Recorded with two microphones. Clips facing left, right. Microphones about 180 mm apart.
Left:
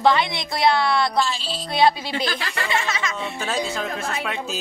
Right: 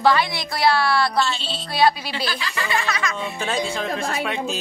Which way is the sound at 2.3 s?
55° left (ahead or behind).